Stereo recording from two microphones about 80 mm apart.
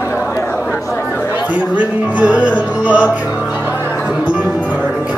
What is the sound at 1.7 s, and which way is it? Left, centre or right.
Music, centre.